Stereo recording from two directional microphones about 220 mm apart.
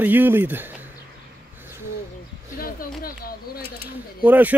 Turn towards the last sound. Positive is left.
turn(degrees=-5)  # may be behind; listen again after turning